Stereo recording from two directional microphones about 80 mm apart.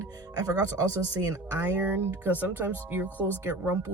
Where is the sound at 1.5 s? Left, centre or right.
Right.